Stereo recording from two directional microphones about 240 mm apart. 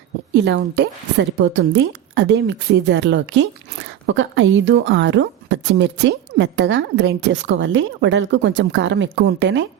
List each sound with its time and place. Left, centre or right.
0.3 s a woman's voice: right